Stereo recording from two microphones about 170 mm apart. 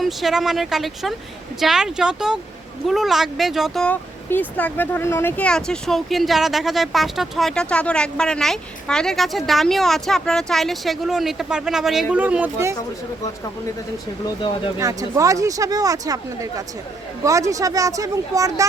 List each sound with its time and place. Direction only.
0.0 s speech: centre (ahead or behind)
14.8 s speech: 20° right (ahead or behind)